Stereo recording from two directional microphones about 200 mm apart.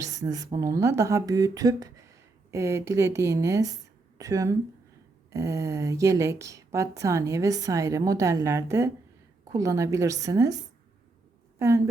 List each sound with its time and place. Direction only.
0.0 s a woman's voice: 15° right (ahead or behind)